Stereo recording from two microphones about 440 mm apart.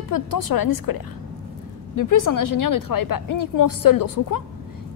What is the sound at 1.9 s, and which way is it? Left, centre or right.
A woman's voice, left.